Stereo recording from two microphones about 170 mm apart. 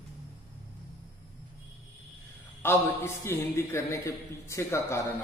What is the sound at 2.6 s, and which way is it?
A man's voice, 15° left (ahead or behind).